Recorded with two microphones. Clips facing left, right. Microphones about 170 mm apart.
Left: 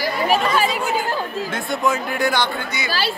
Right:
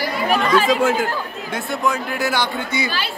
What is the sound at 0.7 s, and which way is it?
Speech, 90° right.